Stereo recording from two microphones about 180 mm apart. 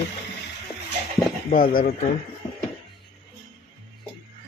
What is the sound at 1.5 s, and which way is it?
Speech, 50° left (ahead or behind).